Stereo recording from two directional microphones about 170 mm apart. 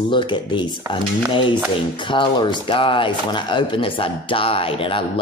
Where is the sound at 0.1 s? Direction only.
30° left (ahead or behind).